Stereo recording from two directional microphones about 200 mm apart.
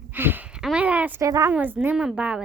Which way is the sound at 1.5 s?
10° right (ahead or behind).